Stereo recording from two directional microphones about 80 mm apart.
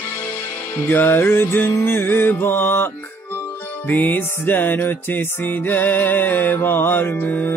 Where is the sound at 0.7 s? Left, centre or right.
Left.